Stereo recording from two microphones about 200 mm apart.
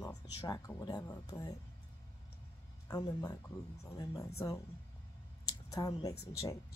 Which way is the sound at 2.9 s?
20° left (ahead or behind).